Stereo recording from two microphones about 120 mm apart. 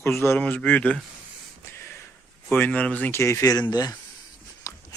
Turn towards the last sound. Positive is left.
turn(degrees=25)  # may be behind; listen again after turning